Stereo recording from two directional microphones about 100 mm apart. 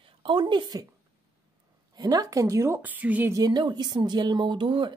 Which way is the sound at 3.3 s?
40° right (ahead or behind).